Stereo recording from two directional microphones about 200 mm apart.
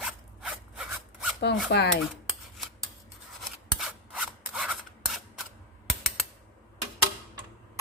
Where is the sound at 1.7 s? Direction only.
55° left (ahead or behind).